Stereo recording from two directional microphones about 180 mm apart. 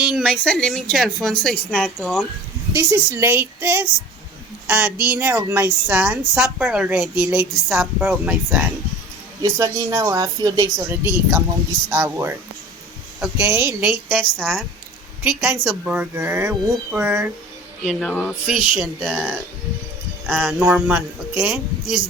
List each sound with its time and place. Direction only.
0.0 s speech: centre (ahead or behind)
2.7 s a woman's voice: 15° right (ahead or behind)
9.4 s a woman's voice: 20° right (ahead or behind)
17.8 s speech: 5° left (ahead or behind)
20.6 s speech: 5° right (ahead or behind)